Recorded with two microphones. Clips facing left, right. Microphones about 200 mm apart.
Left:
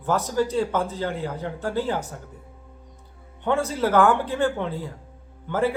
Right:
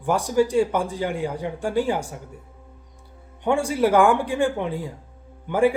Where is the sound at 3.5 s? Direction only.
15° right (ahead or behind).